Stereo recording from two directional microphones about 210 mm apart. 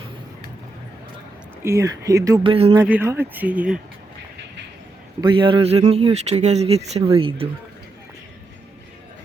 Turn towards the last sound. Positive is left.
turn(degrees=-25)  # may be behind; listen again after turning